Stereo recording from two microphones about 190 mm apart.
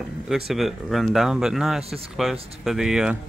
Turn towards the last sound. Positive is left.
turn(degrees=-5)  # may be behind; listen again after turning